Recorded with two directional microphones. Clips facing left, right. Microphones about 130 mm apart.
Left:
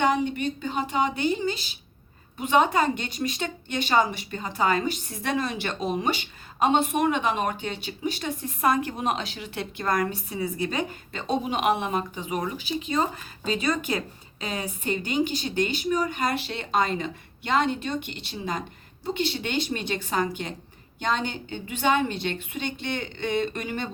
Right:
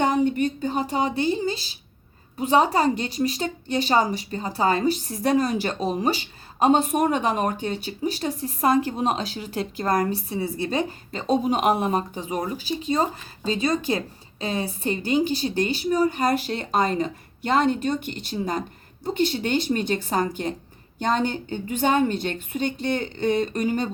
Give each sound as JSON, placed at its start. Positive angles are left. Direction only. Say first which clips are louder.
{"t": 0.0, "sound": "a woman's voice", "louder": "right 3 dB", "side_deg": -45}